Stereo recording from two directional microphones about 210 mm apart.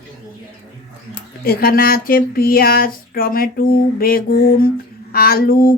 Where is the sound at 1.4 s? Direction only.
45° left (ahead or behind).